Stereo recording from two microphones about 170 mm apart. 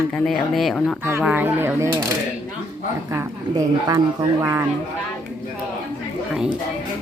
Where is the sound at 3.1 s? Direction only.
15° right (ahead or behind).